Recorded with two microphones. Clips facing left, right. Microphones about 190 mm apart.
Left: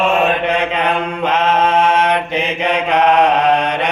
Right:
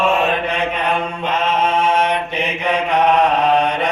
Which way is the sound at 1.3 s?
90° left.